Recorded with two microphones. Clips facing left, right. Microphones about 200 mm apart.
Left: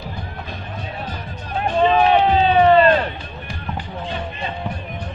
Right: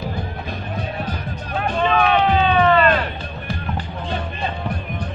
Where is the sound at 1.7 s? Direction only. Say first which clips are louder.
Left 3 dB; 30° left (ahead or behind).